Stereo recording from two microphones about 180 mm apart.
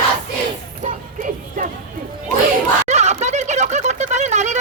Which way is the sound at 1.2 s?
50° right (ahead or behind).